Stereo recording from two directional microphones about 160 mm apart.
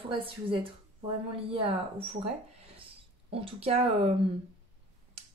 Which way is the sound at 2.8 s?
35° right (ahead or behind).